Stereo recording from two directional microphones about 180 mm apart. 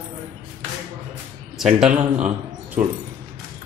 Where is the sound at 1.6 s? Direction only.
5° right (ahead or behind).